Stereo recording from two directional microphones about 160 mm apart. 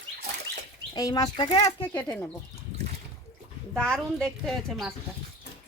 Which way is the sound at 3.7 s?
5° left (ahead or behind).